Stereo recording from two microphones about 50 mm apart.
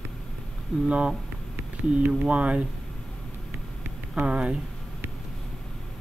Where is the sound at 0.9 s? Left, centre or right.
Right.